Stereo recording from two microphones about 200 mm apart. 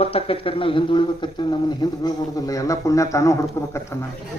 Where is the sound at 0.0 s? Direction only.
30° left (ahead or behind).